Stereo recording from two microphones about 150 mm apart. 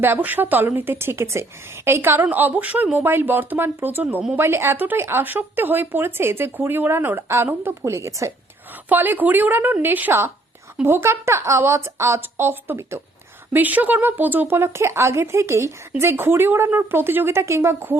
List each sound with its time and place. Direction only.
0.0 s speech: 15° right (ahead or behind)